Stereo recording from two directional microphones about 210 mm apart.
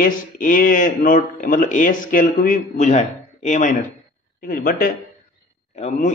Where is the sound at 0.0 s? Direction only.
40° left (ahead or behind).